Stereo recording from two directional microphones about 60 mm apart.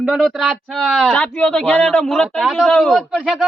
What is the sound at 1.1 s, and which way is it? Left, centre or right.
Speech, centre.